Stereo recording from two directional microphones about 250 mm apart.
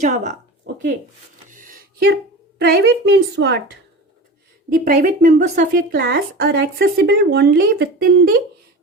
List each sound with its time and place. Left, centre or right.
0.0 s speech: right
1.5 s a sound: right
2.6 s a woman's voice: right
4.9 s a woman's voice: right